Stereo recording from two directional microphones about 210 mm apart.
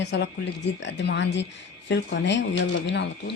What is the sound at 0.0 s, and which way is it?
Speech, 55° left (ahead or behind).